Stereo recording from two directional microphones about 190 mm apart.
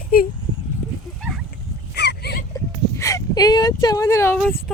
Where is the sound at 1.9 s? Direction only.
60° left (ahead or behind).